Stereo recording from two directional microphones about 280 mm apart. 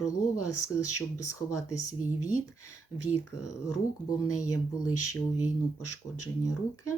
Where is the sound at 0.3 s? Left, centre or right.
Left.